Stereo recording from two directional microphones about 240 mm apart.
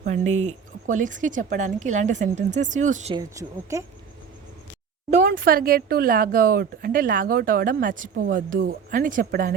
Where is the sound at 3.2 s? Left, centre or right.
Centre.